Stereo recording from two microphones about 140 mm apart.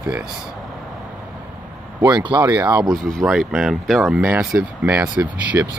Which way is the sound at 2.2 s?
35° right (ahead or behind).